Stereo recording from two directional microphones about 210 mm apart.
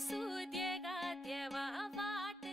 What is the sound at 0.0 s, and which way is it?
Music, centre (ahead or behind).